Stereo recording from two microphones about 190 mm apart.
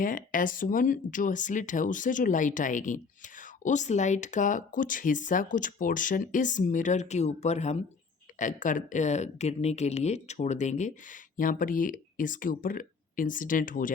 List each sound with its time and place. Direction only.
0.0 s speech: 45° left (ahead or behind)